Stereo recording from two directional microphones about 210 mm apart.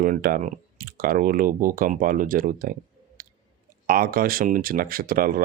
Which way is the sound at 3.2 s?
40° right (ahead or behind).